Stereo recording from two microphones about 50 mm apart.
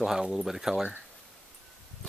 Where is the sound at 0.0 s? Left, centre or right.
Centre.